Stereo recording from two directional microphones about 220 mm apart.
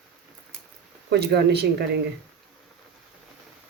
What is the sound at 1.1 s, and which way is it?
Speech, 50° right (ahead or behind).